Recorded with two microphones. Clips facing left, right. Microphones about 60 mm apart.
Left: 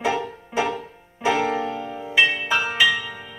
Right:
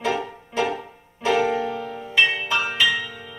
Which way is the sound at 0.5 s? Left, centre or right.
Centre.